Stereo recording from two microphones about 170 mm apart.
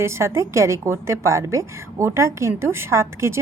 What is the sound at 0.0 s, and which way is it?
A woman's voice, 15° right (ahead or behind).